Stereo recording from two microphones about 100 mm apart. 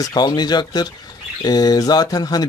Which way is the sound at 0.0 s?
45° left (ahead or behind).